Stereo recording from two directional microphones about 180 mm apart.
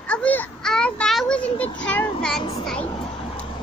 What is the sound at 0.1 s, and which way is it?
Children playing, 10° left (ahead or behind).